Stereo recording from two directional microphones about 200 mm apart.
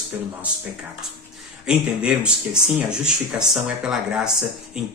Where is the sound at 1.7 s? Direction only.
5° right (ahead or behind).